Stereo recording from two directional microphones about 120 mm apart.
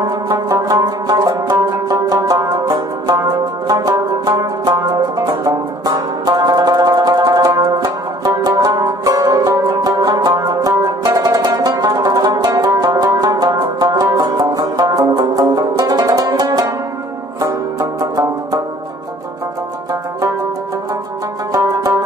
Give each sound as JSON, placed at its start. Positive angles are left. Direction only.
{"t": 0.0, "sound": "music", "side_deg": -35}
{"t": 17.4, "sound": "banjo", "side_deg": -30}
{"t": 21.5, "sound": "music", "side_deg": -30}